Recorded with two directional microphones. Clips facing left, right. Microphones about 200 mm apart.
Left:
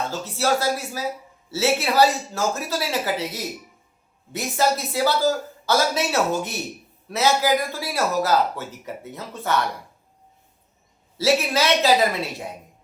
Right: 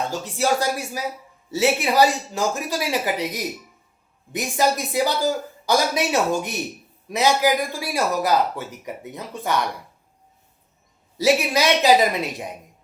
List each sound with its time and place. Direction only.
0.0 s speech: 15° right (ahead or behind)
11.2 s speech: 15° right (ahead or behind)